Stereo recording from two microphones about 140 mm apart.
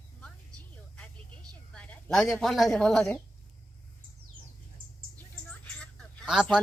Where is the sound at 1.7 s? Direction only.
10° left (ahead or behind).